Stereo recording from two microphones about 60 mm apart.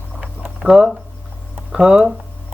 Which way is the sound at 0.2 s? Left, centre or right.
Right.